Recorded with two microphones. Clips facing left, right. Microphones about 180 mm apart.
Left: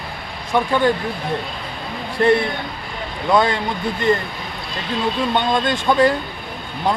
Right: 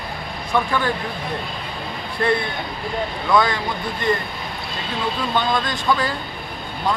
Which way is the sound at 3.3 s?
25° left (ahead or behind).